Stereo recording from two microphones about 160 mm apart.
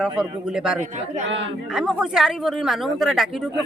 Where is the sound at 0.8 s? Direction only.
45° right (ahead or behind).